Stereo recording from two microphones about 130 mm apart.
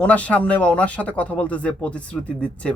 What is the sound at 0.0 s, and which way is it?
Speech, 10° left (ahead or behind).